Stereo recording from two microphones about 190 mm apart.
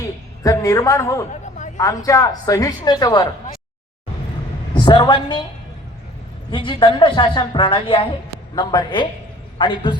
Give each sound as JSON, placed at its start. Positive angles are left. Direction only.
{"t": 0.0, "sound": "a woman's voice", "side_deg": 15}
{"t": 1.3, "sound": "a sound", "side_deg": 40}
{"t": 1.8, "sound": "a woman's voice", "side_deg": 20}
{"t": 4.9, "sound": "a woman's voice", "side_deg": 20}
{"t": 6.5, "sound": "a woman's voice", "side_deg": 25}